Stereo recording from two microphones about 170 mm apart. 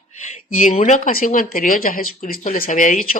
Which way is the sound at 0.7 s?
45° left (ahead or behind).